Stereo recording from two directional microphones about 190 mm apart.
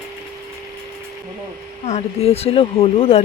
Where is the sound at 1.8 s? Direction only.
35° left (ahead or behind).